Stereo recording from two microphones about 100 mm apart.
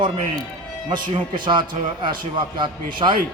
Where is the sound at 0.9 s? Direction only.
50° right (ahead or behind).